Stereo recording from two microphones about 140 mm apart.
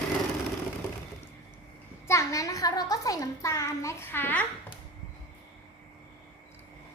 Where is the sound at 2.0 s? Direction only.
20° left (ahead or behind).